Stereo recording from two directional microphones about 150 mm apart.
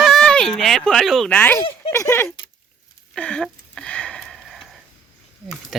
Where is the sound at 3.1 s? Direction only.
5° left (ahead or behind).